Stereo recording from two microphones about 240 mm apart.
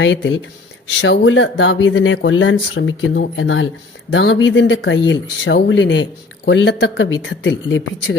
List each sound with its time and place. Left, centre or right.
0.0 s speech: left